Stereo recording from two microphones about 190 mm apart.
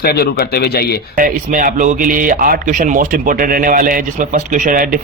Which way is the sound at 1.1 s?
45° right (ahead or behind).